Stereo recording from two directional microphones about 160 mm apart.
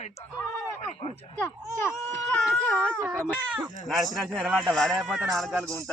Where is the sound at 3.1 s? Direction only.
15° right (ahead or behind).